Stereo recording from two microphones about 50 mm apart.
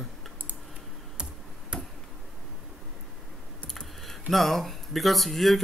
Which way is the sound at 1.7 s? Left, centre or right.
Centre.